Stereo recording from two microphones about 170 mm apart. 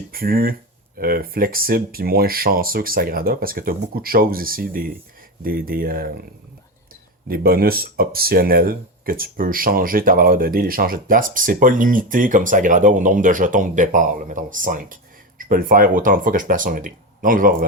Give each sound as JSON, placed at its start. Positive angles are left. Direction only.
{"t": 0.1, "sound": "speech", "side_deg": -60}
{"t": 7.3, "sound": "speech", "side_deg": -60}